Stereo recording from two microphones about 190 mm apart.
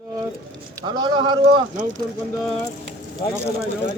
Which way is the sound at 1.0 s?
20° right (ahead or behind).